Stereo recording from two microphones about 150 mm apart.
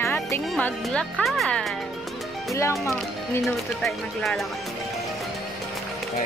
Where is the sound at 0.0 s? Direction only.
15° left (ahead or behind).